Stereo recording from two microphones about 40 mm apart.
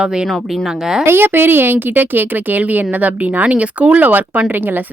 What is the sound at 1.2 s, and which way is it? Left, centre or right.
A woman's voice, right.